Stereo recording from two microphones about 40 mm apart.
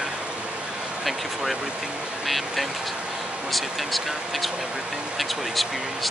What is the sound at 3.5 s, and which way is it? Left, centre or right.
Speech, centre.